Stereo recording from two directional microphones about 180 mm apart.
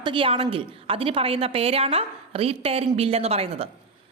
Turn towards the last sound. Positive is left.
turn(degrees=-35)  # may be behind; listen again after turning